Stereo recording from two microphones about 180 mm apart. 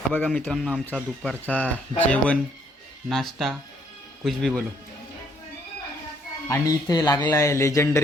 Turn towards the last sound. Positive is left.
turn(degrees=15)  # may be behind; listen again after turning